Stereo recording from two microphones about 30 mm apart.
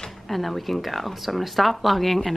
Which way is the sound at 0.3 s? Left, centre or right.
Centre.